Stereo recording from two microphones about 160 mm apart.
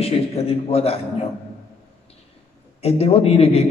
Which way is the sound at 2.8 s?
40° left (ahead or behind).